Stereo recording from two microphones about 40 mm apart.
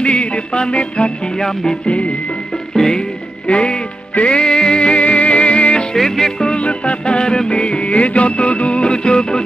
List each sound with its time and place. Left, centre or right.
0.0 s music: left
1.4 s music: centre
3.4 s music: left
5.9 s music: centre
6.6 s music: left